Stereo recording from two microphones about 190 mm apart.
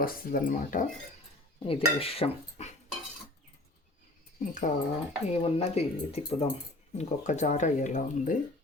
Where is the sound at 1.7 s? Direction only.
30° left (ahead or behind).